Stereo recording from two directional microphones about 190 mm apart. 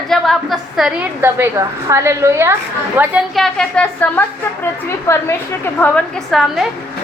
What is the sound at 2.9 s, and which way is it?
A woman's voice, centre (ahead or behind).